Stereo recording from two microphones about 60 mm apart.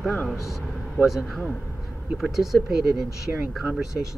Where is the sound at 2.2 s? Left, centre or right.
Centre.